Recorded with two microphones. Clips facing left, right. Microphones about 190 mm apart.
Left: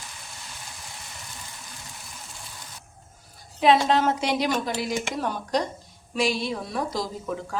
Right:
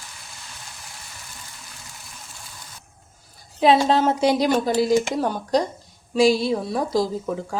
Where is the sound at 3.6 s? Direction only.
30° right (ahead or behind).